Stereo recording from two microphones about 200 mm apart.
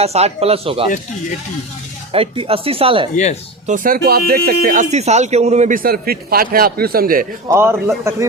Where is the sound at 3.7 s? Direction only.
45° right (ahead or behind).